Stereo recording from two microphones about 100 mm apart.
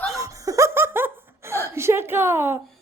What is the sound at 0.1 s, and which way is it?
Laughter, 35° right (ahead or behind).